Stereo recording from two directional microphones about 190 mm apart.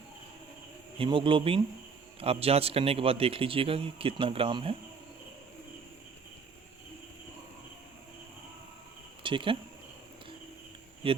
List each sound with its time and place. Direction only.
0.9 s a man's voice: 25° right (ahead or behind)
9.2 s speech: 25° right (ahead or behind)
11.0 s a man's voice: 30° right (ahead or behind)